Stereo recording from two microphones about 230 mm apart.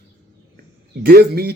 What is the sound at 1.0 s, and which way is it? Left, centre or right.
Speech, right.